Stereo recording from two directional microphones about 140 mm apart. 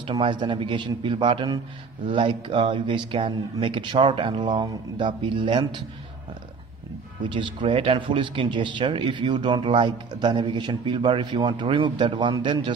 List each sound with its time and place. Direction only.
0.0 s speech: 35° right (ahead or behind)
7.2 s speech: 35° right (ahead or behind)